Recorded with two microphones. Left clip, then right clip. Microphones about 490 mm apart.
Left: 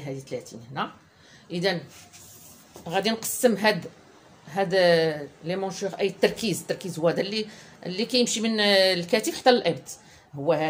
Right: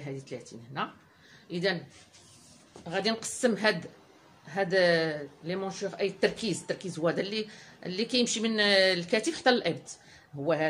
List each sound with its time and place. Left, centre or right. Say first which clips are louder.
0.0 s speech: left 6 dB; right
2.8 s speech: left 4 dB; right